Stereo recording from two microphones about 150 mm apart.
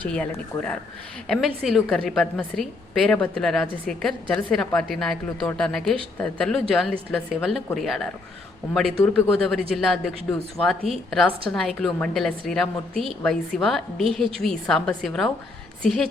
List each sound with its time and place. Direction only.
1.3 s a woman's voice: centre (ahead or behind)